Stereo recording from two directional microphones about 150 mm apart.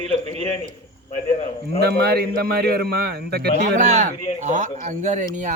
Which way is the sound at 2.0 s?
90° right.